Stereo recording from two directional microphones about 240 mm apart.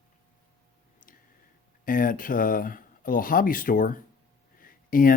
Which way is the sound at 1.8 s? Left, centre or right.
Left.